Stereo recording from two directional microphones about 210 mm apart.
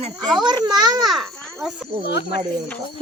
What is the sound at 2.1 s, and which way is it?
Speech, 55° left (ahead or behind).